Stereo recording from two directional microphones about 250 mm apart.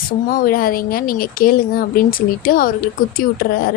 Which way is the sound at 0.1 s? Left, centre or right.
Left.